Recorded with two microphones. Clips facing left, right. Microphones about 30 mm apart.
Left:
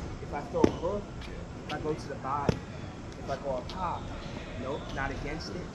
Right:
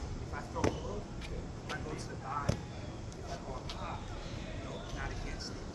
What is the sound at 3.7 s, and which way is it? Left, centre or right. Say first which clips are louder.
Speech: left 9 dB; centre.